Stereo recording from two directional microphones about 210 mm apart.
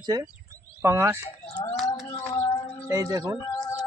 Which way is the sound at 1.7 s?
Centre (ahead or behind).